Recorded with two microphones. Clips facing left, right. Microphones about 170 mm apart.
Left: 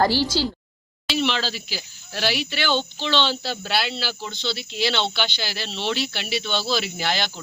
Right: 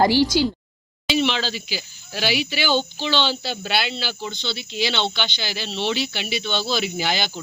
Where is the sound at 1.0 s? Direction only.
Centre (ahead or behind).